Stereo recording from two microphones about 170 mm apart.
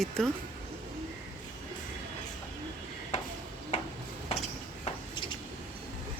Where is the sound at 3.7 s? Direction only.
35° left (ahead or behind).